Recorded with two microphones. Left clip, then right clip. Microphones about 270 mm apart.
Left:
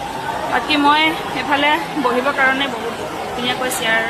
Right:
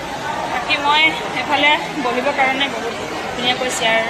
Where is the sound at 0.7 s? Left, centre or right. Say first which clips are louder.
Even; centre.